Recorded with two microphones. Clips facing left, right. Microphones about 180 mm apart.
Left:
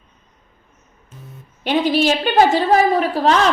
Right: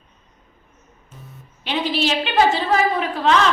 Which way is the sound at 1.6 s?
45° left (ahead or behind).